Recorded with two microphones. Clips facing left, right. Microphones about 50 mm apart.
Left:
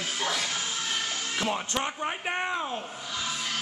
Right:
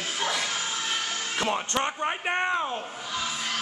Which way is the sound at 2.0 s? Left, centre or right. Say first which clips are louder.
Right 3 dB; centre.